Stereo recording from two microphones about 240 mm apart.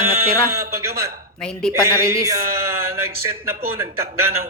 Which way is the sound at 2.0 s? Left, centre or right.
Centre.